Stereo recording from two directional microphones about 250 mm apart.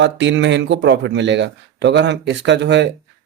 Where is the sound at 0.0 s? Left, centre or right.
Right.